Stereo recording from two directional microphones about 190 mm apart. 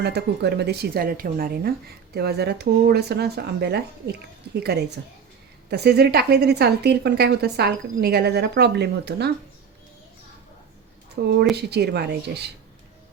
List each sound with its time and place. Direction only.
0.0 s a woman's voice: 60° right (ahead or behind)
11.1 s a woman's voice: 60° right (ahead or behind)